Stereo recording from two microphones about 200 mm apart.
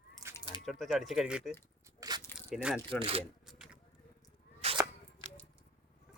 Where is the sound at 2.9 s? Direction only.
25° right (ahead or behind).